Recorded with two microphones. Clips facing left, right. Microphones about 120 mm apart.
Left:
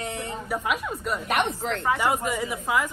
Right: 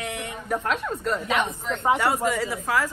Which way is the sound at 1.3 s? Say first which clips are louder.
Left 4 dB; 70° left (ahead or behind).